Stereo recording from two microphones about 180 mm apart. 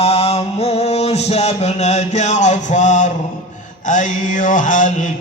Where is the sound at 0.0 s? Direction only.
35° left (ahead or behind).